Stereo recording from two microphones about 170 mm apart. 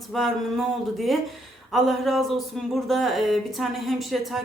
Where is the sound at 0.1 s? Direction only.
Centre (ahead or behind).